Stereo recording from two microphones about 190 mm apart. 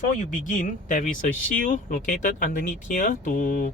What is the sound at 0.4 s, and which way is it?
Speech, 40° left (ahead or behind).